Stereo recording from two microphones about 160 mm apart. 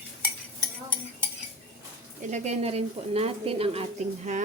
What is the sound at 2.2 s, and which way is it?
A woman's voice, 45° right (ahead or behind).